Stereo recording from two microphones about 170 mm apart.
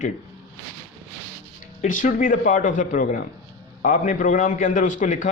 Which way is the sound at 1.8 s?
50° left (ahead or behind).